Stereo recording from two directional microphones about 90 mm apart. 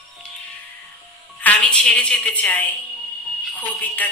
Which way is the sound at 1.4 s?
15° left (ahead or behind).